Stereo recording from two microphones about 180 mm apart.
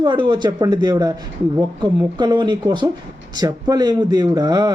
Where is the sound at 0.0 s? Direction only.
25° right (ahead or behind).